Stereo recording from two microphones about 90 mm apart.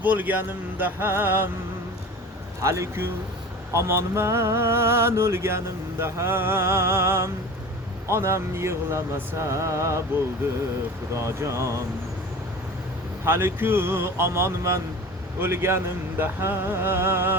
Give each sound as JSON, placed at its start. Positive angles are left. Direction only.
{"t": 0.0, "sound": "speech", "side_deg": -20}
{"t": 2.6, "sound": "speech", "side_deg": -35}
{"t": 11.1, "sound": "speech", "side_deg": -30}
{"t": 13.2, "sound": "speech", "side_deg": -25}